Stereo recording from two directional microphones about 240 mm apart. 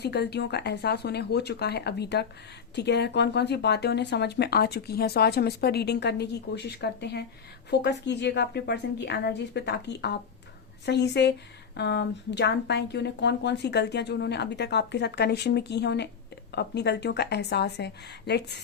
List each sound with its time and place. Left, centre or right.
0.0 s speech: left